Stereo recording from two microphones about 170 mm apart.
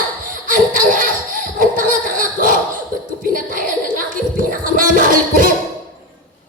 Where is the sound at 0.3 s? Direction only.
55° right (ahead or behind).